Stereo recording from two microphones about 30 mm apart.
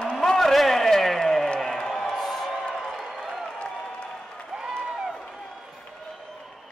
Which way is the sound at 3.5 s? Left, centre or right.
Left.